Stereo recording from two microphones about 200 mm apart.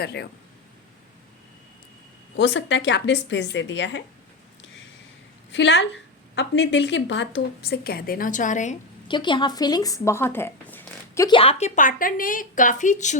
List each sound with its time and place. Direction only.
0.0 s speech: 55° left (ahead or behind)
2.3 s speech: 65° left (ahead or behind)
5.5 s a woman's voice: 65° left (ahead or behind); by 8.7 s 40° left (ahead or behind)
9.0 s speech: 25° left (ahead or behind)
11.3 s a woman's voice: 30° left (ahead or behind)